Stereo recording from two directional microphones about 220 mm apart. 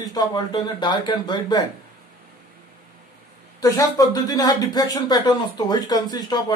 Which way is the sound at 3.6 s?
15° left (ahead or behind).